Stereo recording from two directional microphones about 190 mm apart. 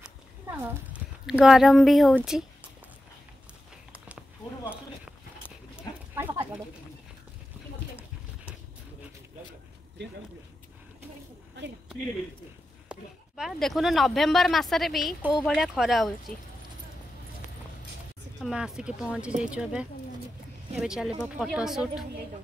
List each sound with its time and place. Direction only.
0.0 s cat: 10° right (ahead or behind)
1.2 s speech: centre (ahead or behind)
5.8 s a sound: 10° right (ahead or behind)
13.4 s speech: centre (ahead or behind)
18.4 s speech: 5° right (ahead or behind)